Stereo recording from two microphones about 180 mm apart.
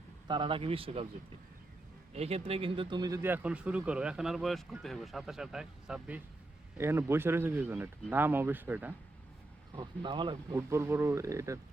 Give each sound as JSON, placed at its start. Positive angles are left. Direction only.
{"t": 0.3, "sound": "speech", "side_deg": -25}
{"t": 2.1, "sound": "speech", "side_deg": -35}
{"t": 9.7, "sound": "speech", "side_deg": -25}
{"t": 10.7, "sound": "speech", "side_deg": -15}